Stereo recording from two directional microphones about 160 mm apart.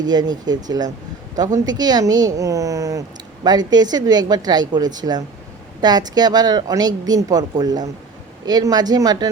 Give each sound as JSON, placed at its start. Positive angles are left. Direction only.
{"t": 0.0, "sound": "a woman's voice", "side_deg": -25}